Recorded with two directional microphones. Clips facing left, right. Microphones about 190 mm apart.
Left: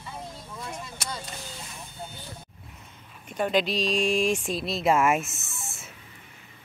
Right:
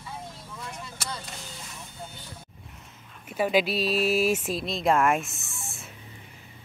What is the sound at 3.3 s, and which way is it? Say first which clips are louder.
Speech: right 1 dB; 5° right (ahead or behind).